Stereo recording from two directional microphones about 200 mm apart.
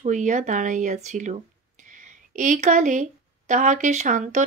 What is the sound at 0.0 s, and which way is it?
Speech, 40° right (ahead or behind).